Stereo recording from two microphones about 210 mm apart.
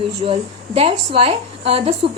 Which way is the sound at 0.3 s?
25° right (ahead or behind).